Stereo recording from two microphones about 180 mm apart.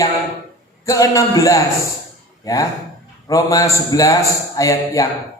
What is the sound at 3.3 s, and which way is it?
A man's voice, 20° left (ahead or behind).